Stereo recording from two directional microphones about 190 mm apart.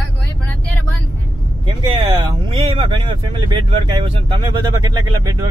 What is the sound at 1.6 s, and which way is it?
Vehicle, 25° right (ahead or behind).